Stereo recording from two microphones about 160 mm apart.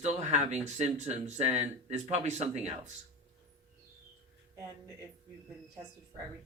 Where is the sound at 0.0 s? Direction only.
45° right (ahead or behind).